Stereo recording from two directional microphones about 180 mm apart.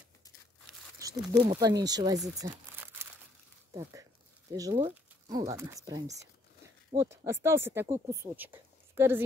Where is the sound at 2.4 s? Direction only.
15° right (ahead or behind).